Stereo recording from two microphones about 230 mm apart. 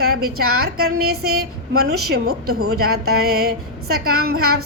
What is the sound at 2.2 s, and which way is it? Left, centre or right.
Speech, right.